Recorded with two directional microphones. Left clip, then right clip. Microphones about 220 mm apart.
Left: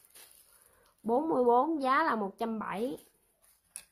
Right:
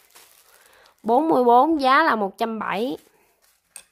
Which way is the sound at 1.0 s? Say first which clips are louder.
Right 10 dB; 45° right (ahead or behind).